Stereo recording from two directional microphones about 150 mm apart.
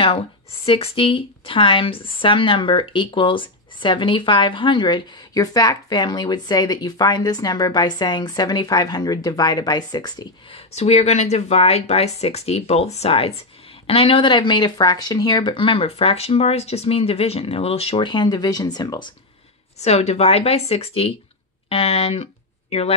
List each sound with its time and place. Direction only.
0.7 s speech: 40° left (ahead or behind)
10.8 s speech: 45° left (ahead or behind); by 19.1 s 30° left (ahead or behind)
19.8 s speech: 45° left (ahead or behind)